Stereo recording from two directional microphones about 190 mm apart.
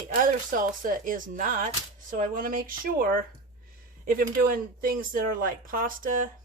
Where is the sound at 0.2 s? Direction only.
45° right (ahead or behind).